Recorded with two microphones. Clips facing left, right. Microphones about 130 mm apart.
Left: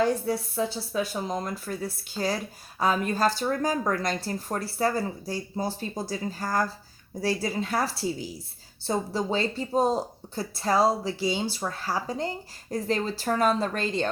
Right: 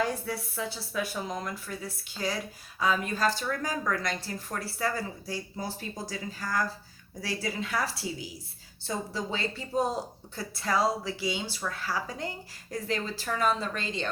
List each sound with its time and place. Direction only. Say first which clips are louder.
0.0 s a woman's voice: left 6 dB; 30° left (ahead or behind)